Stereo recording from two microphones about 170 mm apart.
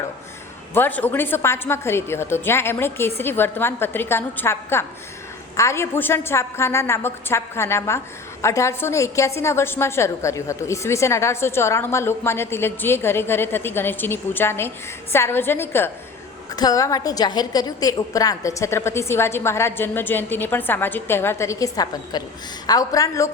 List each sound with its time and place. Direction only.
0.7 s a woman's voice: 10° left (ahead or behind)